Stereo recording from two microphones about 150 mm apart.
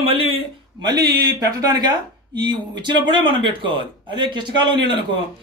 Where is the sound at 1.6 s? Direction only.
30° right (ahead or behind).